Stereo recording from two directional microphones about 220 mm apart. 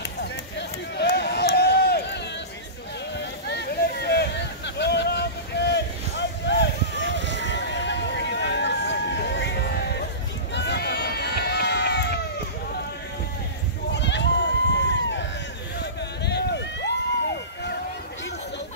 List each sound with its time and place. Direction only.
0.2 s run: 50° left (ahead or behind)
3.2 s a sound: 50° left (ahead or behind)
10.5 s run: 50° left (ahead or behind)
13.8 s sheep: 55° left (ahead or behind)
15.8 s run: 50° left (ahead or behind)